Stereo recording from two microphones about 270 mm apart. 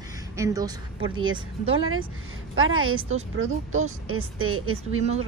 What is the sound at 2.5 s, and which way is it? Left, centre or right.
Speech, right.